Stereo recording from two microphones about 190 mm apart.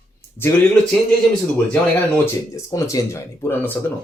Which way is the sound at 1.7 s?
10° left (ahead or behind).